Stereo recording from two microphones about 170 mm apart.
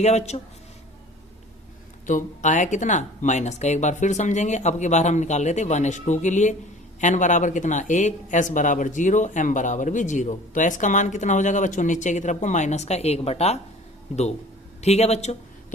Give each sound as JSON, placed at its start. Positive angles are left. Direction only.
{"t": 0.0, "sound": "speech", "side_deg": 40}
{"t": 2.0, "sound": "speech", "side_deg": 45}
{"t": 14.8, "sound": "speech", "side_deg": 40}